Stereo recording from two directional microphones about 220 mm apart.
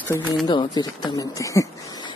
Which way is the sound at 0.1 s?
15° left (ahead or behind).